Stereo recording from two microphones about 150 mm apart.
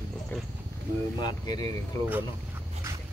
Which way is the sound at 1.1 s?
25° left (ahead or behind).